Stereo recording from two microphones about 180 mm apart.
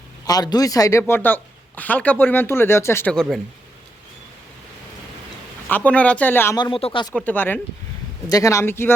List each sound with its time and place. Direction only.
0.3 s speech: 20° left (ahead or behind); by 3.4 s 5° left (ahead or behind)
5.6 s speech: 10° left (ahead or behind)
6.7 s speech: 30° left (ahead or behind)
7.1 s speech: 10° left (ahead or behind)